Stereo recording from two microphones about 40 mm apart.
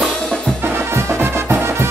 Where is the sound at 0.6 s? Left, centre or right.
Right.